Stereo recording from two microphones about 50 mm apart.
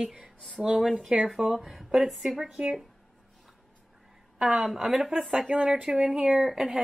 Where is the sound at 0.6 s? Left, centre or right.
Centre.